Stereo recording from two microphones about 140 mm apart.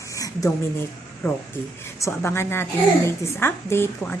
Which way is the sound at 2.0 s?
20° left (ahead or behind).